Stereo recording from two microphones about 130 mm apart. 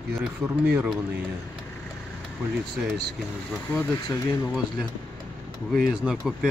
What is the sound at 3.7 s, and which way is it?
Speech, 25° left (ahead or behind).